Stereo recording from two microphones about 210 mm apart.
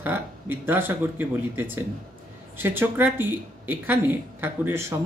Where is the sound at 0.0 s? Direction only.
10° right (ahead or behind).